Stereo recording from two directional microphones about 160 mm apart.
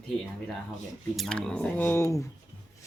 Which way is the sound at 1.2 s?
5° left (ahead or behind).